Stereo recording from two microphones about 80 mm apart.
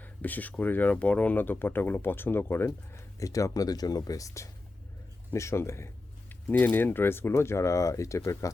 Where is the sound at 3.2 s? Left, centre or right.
Left.